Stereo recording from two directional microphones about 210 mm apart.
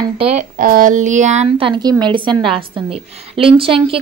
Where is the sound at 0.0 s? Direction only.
30° right (ahead or behind).